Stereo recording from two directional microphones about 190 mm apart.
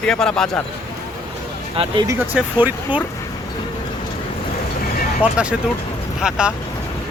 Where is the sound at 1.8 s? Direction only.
20° right (ahead or behind).